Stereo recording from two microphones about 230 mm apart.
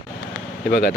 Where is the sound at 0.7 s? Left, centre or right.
Left.